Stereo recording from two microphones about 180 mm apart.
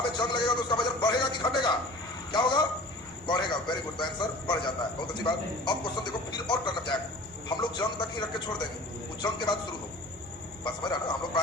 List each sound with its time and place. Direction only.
0.1 s a man's voice: 25° left (ahead or behind)
10.6 s a man's voice: 25° left (ahead or behind)